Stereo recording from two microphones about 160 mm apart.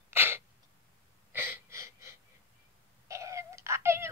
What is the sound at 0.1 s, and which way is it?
Sneeze, 15° right (ahead or behind).